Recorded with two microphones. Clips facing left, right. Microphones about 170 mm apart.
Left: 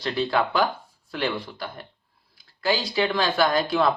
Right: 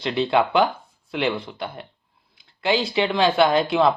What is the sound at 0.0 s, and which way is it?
Speech, 25° right (ahead or behind).